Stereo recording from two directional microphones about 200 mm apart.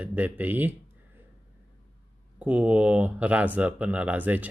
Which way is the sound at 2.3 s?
5° right (ahead or behind).